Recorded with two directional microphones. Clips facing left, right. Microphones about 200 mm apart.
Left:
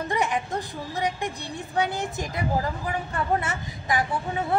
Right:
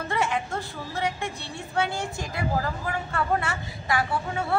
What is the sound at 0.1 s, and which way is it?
Music, 15° left (ahead or behind).